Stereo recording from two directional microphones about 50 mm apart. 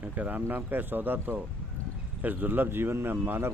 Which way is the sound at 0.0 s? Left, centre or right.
Right.